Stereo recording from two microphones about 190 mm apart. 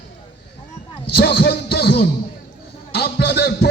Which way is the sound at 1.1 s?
55° left (ahead or behind).